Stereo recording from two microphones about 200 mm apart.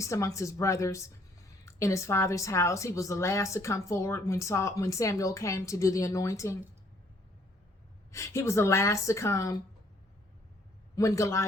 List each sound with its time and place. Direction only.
0.0 s speech: 15° left (ahead or behind)
8.1 s speech: 15° left (ahead or behind)
10.9 s speech: 15° left (ahead or behind)